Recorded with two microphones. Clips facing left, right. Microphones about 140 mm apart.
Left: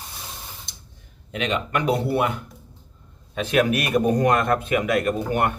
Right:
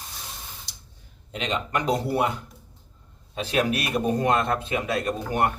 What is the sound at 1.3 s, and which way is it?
A man's voice, 30° right (ahead or behind).